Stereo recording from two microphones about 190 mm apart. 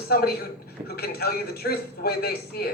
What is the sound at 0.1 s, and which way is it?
A woman's voice, 55° left (ahead or behind).